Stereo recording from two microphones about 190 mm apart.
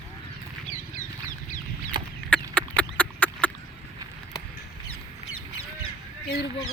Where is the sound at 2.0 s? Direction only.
25° right (ahead or behind).